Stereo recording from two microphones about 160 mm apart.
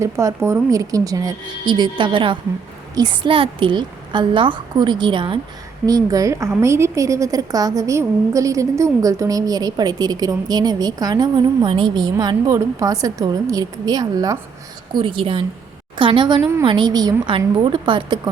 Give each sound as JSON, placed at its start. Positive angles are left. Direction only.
{"t": 0.0, "sound": "a woman's voice", "side_deg": -20}